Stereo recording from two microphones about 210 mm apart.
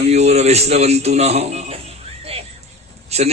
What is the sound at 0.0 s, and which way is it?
A man's voice, 30° right (ahead or behind).